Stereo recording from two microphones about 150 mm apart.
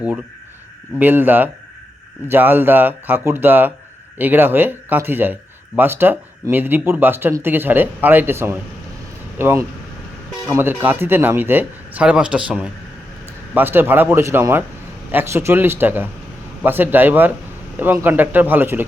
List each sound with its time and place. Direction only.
0.9 s speech: 10° right (ahead or behind)